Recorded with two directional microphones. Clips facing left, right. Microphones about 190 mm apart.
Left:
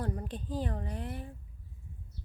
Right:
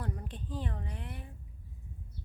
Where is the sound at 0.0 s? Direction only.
35° left (ahead or behind).